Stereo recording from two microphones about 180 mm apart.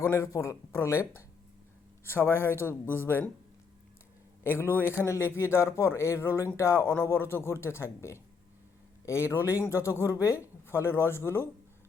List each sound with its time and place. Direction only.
0.0 s speech: 15° left (ahead or behind)
4.4 s speech: 15° left (ahead or behind)